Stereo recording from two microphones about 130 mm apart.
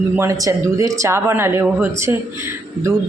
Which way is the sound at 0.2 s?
25° right (ahead or behind).